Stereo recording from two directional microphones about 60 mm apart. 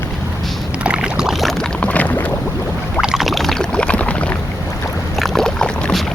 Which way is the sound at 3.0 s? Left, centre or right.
Centre.